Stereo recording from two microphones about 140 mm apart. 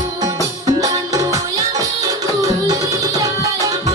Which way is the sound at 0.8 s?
25° right (ahead or behind).